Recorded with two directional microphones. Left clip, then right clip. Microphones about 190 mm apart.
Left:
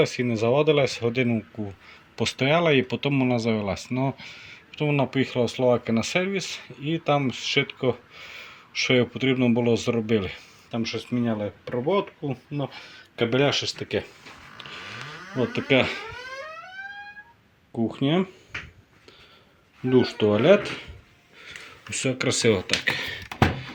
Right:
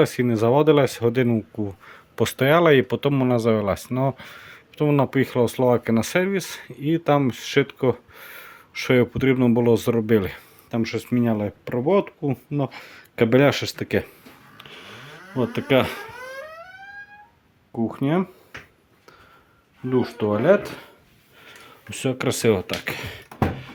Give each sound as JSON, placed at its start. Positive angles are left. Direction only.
{"t": 0.0, "sound": "speech", "side_deg": -30}
{"t": 14.6, "sound": "a sound", "side_deg": -15}
{"t": 15.4, "sound": "speech", "side_deg": -15}
{"t": 17.7, "sound": "speech", "side_deg": -10}
{"t": 19.9, "sound": "speech", "side_deg": 10}
{"t": 21.4, "sound": "a sound", "side_deg": -15}